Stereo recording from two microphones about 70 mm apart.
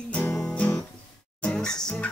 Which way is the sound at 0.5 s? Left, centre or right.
Centre.